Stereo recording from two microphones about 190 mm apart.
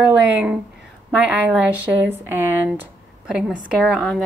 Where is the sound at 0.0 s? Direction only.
10° right (ahead or behind).